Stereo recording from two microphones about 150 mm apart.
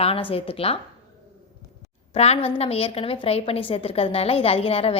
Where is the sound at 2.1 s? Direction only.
40° left (ahead or behind).